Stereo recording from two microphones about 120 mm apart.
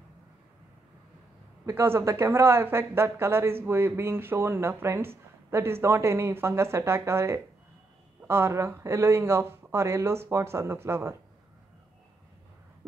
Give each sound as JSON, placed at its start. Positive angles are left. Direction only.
{"t": 1.7, "sound": "speech", "side_deg": -25}